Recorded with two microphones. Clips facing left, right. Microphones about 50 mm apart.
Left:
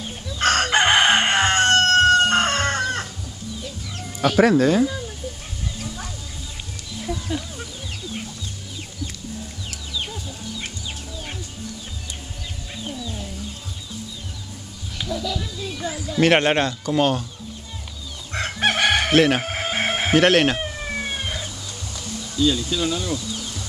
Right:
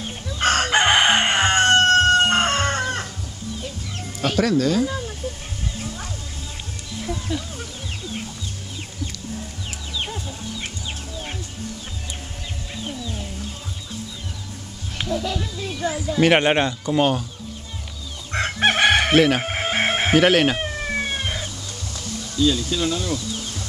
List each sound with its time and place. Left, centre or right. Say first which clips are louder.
0.0 s chicken: even; centre
0.5 s crowing: even; centre
2.1 s chicken: even; centre
4.4 s speech: left 3 dB; centre
7.2 s chicken: even; centre
9.9 s chicken: right 1 dB; right
12.8 s chicken: even; centre
15.2 s a sound: right 1 dB; right
18.3 s chicken: right 2 dB; right
19.1 s speech: left 3 dB; centre
19.4 s chicken: right 2 dB; centre
20.2 s speech: even; centre
20.5 s police car: right 2 dB; centre
21.9 s speech: right 1 dB; centre